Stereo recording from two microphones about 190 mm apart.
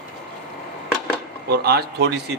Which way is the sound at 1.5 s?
55° right (ahead or behind).